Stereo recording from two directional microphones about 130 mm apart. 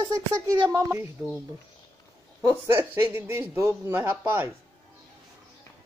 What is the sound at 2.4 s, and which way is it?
Speech, 20° right (ahead or behind).